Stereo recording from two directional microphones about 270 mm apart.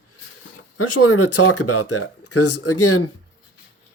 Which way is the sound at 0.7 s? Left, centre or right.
Left.